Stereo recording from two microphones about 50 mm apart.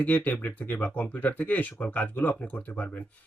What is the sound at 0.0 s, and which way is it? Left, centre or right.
Speech, left.